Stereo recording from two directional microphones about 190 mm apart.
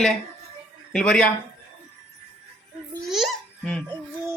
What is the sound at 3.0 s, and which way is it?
Baby laughter, centre (ahead or behind).